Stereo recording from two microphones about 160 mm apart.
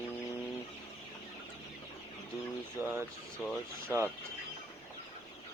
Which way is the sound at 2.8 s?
15° right (ahead or behind).